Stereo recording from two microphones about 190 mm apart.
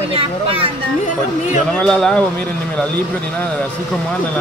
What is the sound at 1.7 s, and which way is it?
Speech, 5° left (ahead or behind).